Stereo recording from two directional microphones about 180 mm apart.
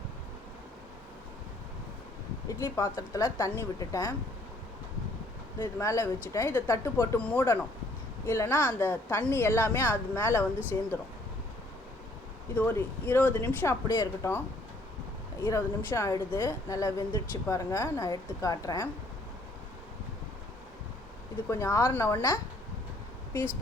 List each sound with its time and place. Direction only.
2.5 s a woman's voice: 20° left (ahead or behind)
5.5 s a woman's voice: 15° left (ahead or behind)
12.5 s a woman's voice: 10° left (ahead or behind)
15.4 s a woman's voice: 15° left (ahead or behind)
21.6 s a woman's voice: 15° left (ahead or behind)